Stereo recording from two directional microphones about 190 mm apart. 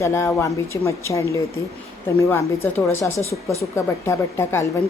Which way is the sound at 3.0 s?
15° left (ahead or behind).